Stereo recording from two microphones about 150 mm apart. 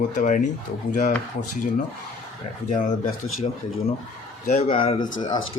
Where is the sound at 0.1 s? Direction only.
60° left (ahead or behind).